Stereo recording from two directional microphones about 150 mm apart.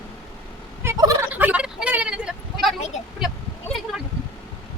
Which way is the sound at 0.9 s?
20° right (ahead or behind).